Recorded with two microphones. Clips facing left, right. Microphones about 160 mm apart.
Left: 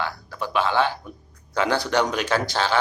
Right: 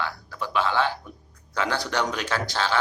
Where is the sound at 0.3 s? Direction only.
15° left (ahead or behind).